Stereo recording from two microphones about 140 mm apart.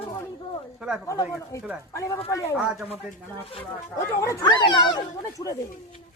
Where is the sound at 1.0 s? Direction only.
20° left (ahead or behind).